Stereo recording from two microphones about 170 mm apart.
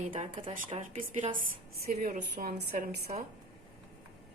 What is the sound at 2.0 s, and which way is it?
Speech, 55° right (ahead or behind).